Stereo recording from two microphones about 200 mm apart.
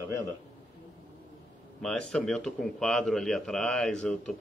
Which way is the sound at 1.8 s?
Centre (ahead or behind).